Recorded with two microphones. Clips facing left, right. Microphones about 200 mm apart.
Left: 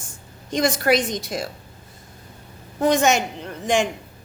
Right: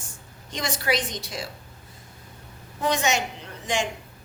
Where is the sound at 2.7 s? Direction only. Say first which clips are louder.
Left 6 dB; 50° left (ahead or behind).